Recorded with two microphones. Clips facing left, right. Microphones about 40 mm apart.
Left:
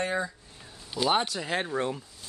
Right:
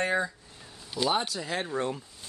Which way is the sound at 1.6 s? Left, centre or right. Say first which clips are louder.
Left 1 dB; centre.